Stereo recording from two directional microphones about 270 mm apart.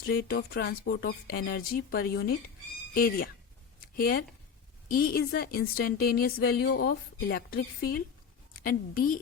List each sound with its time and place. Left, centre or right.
0.0 s a woman's voice: left
3.8 s a sound: left
4.9 s a woman's voice: left